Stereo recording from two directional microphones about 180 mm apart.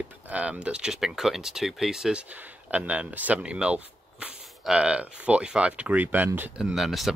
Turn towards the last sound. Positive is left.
turn(degrees=0)  # may be behind; listen again after turning